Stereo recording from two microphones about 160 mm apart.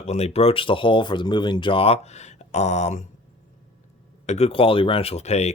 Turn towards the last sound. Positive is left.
turn(degrees=45)  # may be behind; listen again after turning